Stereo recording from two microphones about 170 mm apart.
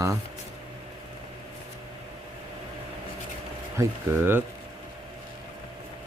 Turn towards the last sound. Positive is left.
turn(degrees=-15)  # may be behind; listen again after turning